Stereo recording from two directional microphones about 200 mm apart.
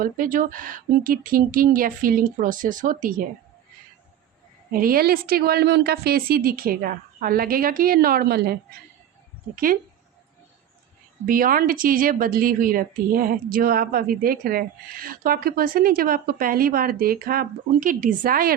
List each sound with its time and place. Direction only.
0.0 s a woman's voice: 40° right (ahead or behind)
4.7 s a woman's voice: 45° right (ahead or behind)
11.3 s a woman's voice: 45° right (ahead or behind)